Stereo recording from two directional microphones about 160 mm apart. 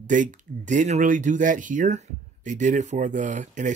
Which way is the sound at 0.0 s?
50° right (ahead or behind).